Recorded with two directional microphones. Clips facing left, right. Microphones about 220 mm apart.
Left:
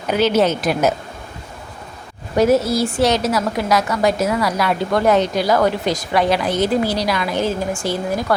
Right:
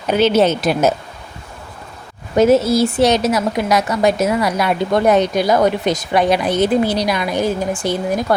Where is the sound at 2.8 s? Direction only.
20° right (ahead or behind).